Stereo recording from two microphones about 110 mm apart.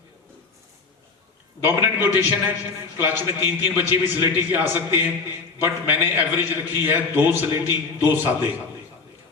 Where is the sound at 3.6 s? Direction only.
15° right (ahead or behind).